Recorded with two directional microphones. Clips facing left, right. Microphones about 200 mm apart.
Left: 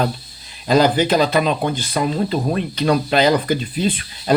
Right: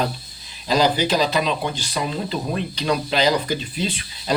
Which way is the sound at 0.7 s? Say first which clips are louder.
Left 4 dB; 55° left (ahead or behind).